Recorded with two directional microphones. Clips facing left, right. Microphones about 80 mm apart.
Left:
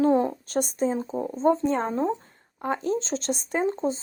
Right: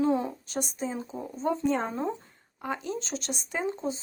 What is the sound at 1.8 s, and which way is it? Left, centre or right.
Speech, left.